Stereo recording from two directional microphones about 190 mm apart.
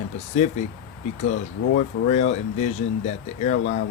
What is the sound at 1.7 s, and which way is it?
Speech, 35° left (ahead or behind).